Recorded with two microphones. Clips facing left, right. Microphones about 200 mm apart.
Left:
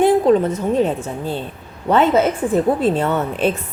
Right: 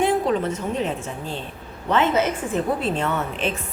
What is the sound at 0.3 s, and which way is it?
Speech, 35° left (ahead or behind).